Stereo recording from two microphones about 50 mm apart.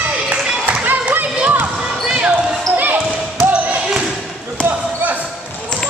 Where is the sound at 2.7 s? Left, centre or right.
Right.